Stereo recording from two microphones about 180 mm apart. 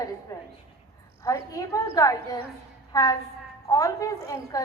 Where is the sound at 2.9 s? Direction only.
20° left (ahead or behind).